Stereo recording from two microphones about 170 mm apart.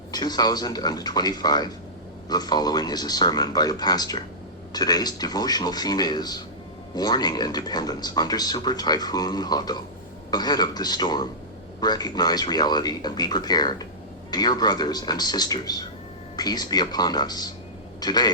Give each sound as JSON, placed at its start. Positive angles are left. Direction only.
{"t": 0.1, "sound": "speech", "side_deg": 25}